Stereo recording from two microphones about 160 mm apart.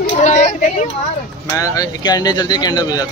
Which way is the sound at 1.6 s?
20° left (ahead or behind).